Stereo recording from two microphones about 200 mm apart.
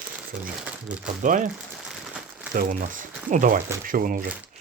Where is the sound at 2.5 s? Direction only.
45° right (ahead or behind).